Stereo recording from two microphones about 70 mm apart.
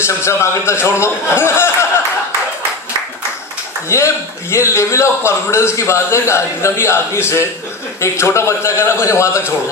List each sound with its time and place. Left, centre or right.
0.0 s a man's voice: left
3.8 s a man's voice: left